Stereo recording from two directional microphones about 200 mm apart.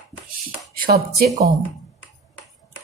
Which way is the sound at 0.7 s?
50° right (ahead or behind).